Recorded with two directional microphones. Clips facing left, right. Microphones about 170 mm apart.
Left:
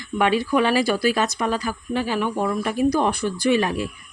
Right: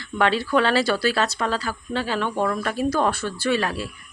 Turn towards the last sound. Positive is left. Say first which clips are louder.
# left 3 dB
turn(degrees=15)  # may be behind; listen again after turning